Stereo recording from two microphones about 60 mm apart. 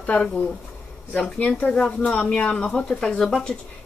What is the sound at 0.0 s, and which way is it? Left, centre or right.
Speech, left.